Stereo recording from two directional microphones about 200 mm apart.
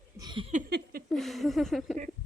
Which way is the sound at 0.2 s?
20° right (ahead or behind).